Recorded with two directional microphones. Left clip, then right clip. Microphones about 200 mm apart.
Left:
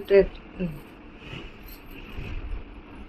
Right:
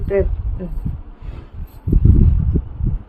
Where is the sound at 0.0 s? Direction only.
15° right (ahead or behind).